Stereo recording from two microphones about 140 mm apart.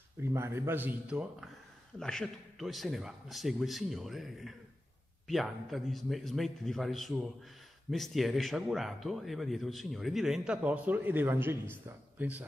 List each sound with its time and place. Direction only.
0.2 s speech: 20° right (ahead or behind)
2.0 s speech: 5° left (ahead or behind); by 12.4 s 10° right (ahead or behind)